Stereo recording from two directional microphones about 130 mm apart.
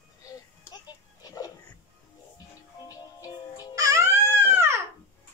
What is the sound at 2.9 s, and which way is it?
Music, 30° left (ahead or behind).